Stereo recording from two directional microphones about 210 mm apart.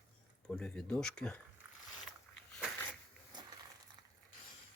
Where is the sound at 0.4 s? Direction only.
5° left (ahead or behind).